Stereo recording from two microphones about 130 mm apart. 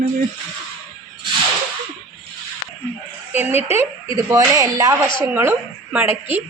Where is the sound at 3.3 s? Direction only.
15° right (ahead or behind).